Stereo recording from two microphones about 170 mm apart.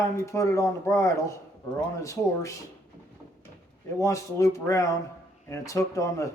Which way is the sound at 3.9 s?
20° left (ahead or behind).